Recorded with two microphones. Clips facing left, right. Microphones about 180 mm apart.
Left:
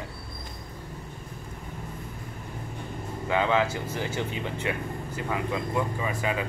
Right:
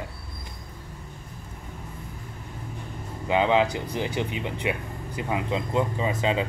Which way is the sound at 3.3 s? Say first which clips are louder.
Right 3 dB; 20° right (ahead or behind).